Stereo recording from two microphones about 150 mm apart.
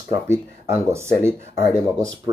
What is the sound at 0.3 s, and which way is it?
Speech, 20° right (ahead or behind).